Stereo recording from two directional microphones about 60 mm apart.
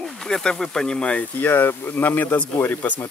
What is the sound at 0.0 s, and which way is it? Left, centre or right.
Speech, centre.